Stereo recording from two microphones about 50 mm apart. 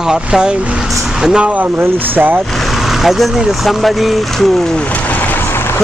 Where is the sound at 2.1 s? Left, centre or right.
Right.